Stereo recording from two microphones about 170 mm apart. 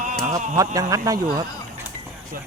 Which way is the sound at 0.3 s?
20° right (ahead or behind).